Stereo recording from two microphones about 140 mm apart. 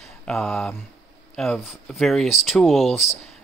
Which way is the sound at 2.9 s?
50° left (ahead or behind).